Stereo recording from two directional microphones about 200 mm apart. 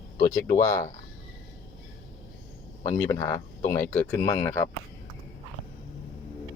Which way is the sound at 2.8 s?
15° left (ahead or behind).